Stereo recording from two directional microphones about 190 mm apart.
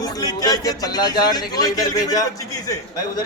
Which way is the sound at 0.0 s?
20° left (ahead or behind).